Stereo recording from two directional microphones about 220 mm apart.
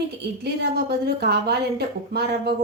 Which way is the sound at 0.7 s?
45° right (ahead or behind).